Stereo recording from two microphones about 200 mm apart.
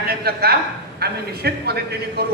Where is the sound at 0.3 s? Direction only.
50° right (ahead or behind).